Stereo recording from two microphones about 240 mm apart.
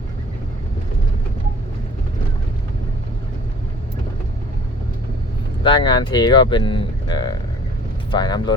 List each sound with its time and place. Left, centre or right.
5.6 s speech: centre